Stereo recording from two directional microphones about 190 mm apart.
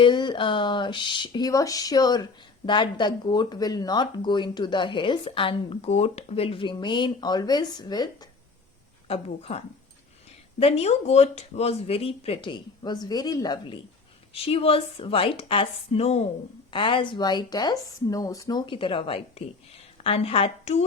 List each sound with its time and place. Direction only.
0.0 s a woman's voice: 25° left (ahead or behind)